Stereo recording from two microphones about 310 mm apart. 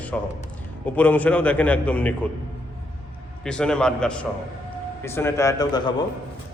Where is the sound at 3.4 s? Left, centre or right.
Centre.